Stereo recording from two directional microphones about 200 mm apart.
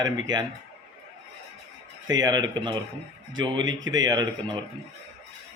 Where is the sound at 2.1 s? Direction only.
20° right (ahead or behind).